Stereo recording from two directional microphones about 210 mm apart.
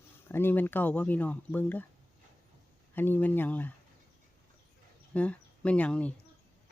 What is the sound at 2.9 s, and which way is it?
Speech, 10° left (ahead or behind).